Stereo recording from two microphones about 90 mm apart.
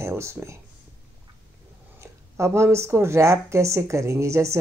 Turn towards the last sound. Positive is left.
turn(degrees=-35)  # may be behind; listen again after turning